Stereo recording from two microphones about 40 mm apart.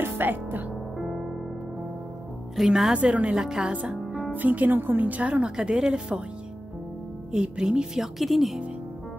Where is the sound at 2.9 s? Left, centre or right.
Right.